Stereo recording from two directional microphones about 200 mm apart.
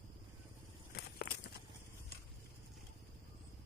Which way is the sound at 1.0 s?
55° left (ahead or behind).